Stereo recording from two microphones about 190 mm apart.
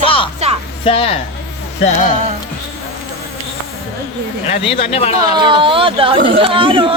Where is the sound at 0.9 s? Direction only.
30° left (ahead or behind).